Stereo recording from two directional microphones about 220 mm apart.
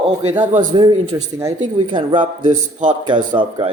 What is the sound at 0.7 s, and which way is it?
Speech, 20° right (ahead or behind).